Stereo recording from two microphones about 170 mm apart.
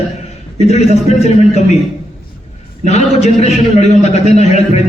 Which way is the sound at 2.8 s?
40° left (ahead or behind).